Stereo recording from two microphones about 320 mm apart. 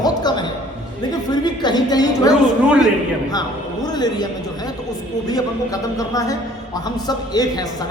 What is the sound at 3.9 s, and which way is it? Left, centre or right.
A woman's voice, centre.